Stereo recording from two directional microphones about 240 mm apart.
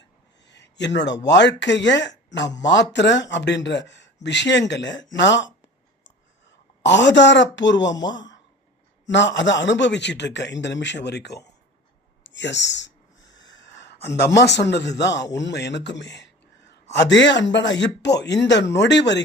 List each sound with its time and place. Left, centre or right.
0.4 s a sound: left
0.9 s speech: left
6.5 s speech: left
13.3 s wheeze: left
14.3 s speech: left
16.1 s a sound: left
16.9 s speech: left